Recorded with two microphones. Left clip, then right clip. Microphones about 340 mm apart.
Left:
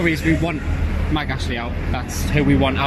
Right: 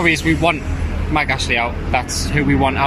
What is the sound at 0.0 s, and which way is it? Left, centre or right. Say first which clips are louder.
Speech: right 5 dB; centre.